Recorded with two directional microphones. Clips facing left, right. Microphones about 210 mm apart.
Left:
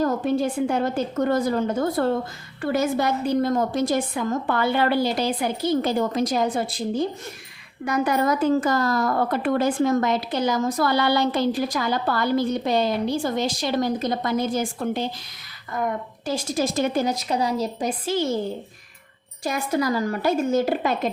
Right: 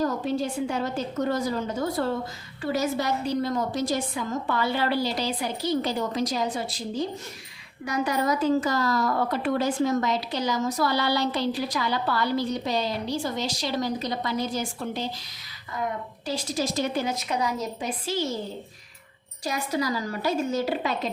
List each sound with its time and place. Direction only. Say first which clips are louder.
0.0 s a woman's voice: left 4 dB; 55° left (ahead or behind); by 17.8 s 30° left (ahead or behind)
17.8 s a woman's voice: left 4 dB; 55° left (ahead or behind)
19.5 s a woman's voice: left 4 dB; 50° left (ahead or behind)